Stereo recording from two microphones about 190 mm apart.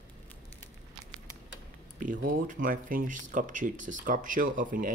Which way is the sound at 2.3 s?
45° right (ahead or behind).